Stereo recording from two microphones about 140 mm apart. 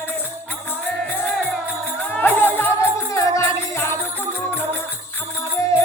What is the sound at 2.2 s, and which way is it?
Music, 15° left (ahead or behind).